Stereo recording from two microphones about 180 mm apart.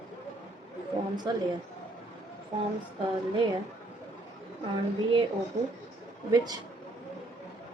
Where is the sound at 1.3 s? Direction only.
20° right (ahead or behind).